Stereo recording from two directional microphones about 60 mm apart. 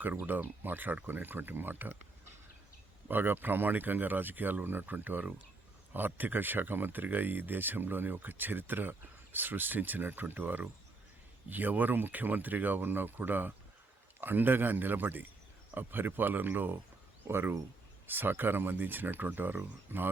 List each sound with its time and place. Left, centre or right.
0.3 s speech: right
3.1 s speech: right